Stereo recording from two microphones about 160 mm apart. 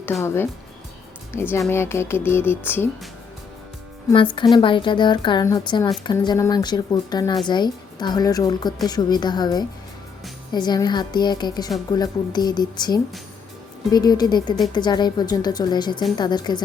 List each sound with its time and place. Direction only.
0.2 s speech: 15° left (ahead or behind)
4.1 s a woman's voice: 30° left (ahead or behind)